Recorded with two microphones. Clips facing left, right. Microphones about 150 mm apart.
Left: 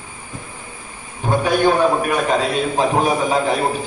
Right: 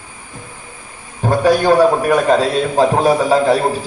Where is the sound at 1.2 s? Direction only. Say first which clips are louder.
Right 5 dB; 35° right (ahead or behind).